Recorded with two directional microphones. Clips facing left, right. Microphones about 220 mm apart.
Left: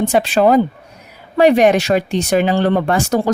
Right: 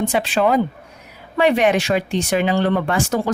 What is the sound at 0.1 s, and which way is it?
Speech, 40° left (ahead or behind).